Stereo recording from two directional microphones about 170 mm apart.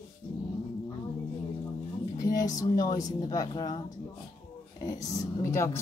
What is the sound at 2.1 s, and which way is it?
Speech, 20° left (ahead or behind).